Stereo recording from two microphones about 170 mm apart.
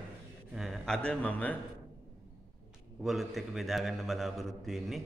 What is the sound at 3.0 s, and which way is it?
A man's voice, centre (ahead or behind).